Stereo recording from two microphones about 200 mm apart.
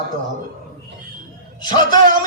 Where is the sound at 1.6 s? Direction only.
20° left (ahead or behind).